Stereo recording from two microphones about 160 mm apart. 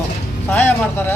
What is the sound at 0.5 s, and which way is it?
Speech, 10° left (ahead or behind).